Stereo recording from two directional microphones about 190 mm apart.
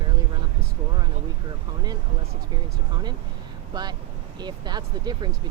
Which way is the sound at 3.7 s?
20° right (ahead or behind).